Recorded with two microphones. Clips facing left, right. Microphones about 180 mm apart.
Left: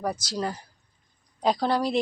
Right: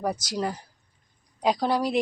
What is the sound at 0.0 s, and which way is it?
A woman's voice, 15° right (ahead or behind).